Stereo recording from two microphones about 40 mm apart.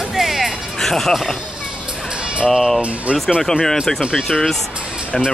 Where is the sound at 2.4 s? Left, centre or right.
Centre.